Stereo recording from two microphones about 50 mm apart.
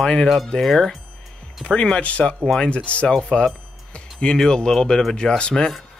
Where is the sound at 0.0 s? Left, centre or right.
Centre.